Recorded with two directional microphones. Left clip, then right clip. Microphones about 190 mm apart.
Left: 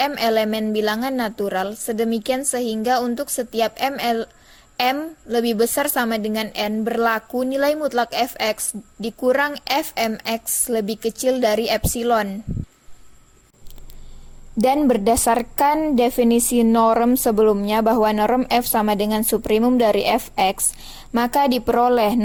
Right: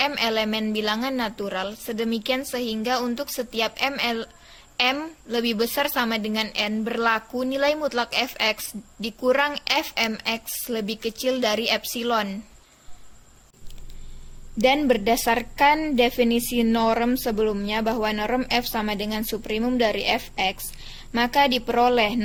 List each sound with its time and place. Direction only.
0.0 s a woman's voice: 40° left (ahead or behind)
14.6 s a woman's voice: 40° left (ahead or behind)